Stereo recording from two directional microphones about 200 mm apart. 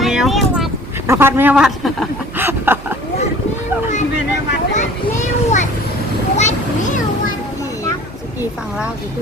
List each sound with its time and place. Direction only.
0.0 s vehicle: centre (ahead or behind)
1.0 s speech: 15° right (ahead or behind)
4.7 s children playing: 35° left (ahead or behind)
6.3 s a sound: 35° left (ahead or behind)